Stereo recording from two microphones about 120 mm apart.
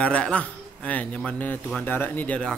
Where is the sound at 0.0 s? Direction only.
10° left (ahead or behind).